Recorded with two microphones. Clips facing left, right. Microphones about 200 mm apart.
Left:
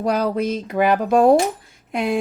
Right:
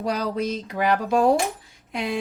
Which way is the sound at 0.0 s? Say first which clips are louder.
Left 5 dB; 50° left (ahead or behind).